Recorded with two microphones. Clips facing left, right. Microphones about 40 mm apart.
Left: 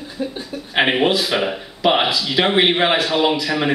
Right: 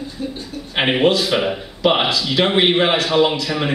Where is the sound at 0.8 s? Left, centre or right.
Centre.